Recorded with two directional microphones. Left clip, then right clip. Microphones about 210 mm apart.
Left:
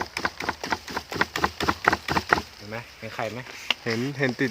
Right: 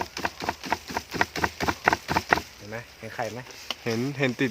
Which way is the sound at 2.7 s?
40° left (ahead or behind).